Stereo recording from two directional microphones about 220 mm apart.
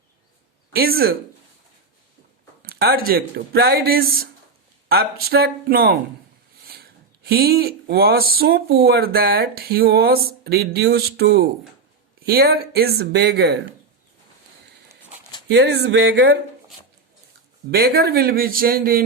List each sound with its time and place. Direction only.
0.7 s speech: 45° right (ahead or behind)
2.6 s speech: 45° right (ahead or behind)
15.4 s speech: 50° right (ahead or behind)
17.7 s speech: 45° right (ahead or behind)